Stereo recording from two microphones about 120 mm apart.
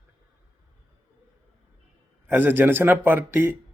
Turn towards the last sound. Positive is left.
turn(degrees=-15)  # may be behind; listen again after turning